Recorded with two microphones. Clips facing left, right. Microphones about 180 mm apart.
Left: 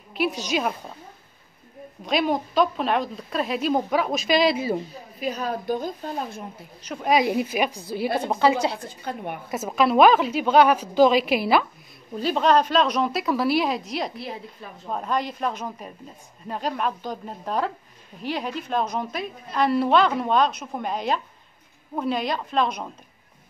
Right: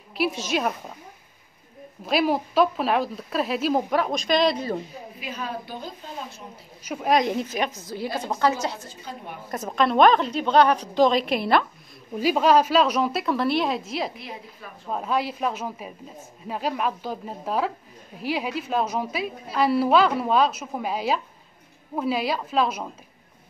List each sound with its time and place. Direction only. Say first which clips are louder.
0.1 s a woman's voice: even; centre (ahead or behind)
2.0 s a woman's voice: right 1 dB; 5° right (ahead or behind)
5.2 s a woman's voice: left 6 dB; 40° left (ahead or behind)
6.8 s a woman's voice: even; 5° right (ahead or behind); by 8.8 s 10° left (ahead or behind)
8.8 s a woman's voice: left 6 dB; 60° left (ahead or behind)
9.5 s a woman's voice: left 1 dB; 5° left (ahead or behind)
12.2 s a woman's voice: right 1 dB; 10° right (ahead or behind)